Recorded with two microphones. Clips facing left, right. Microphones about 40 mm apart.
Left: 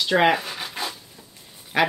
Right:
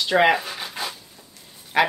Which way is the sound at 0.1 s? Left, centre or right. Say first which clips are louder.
Right 1 dB; centre.